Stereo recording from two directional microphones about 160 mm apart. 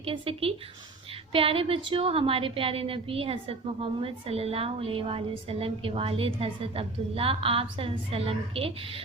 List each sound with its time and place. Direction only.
0.0 s a woman's voice: 35° right (ahead or behind)